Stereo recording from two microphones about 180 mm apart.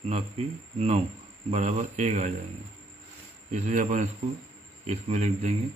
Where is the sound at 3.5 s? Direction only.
40° right (ahead or behind).